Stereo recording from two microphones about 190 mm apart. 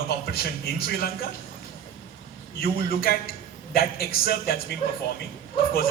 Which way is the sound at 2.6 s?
50° left (ahead or behind).